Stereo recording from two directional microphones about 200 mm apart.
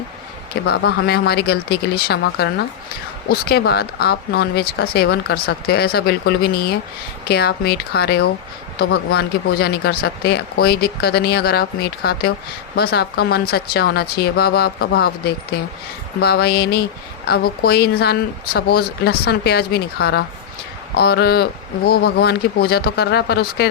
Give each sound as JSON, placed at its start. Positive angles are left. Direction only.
{"t": 0.7, "sound": "speech", "side_deg": 55}